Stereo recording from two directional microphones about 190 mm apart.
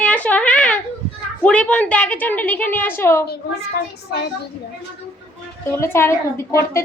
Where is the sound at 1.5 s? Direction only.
5° left (ahead or behind).